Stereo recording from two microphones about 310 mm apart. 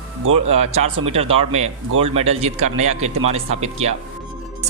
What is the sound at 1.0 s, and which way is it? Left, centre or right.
Speech, centre.